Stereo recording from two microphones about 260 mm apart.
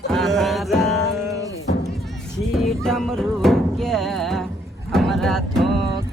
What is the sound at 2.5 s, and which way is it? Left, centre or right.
Music, centre.